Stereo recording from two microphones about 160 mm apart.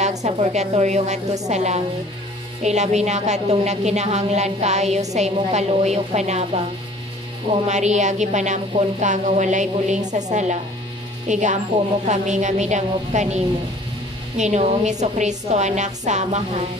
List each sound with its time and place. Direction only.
0.2 s a woman's voice: 45° right (ahead or behind)
7.6 s a woman's voice: 45° right (ahead or behind)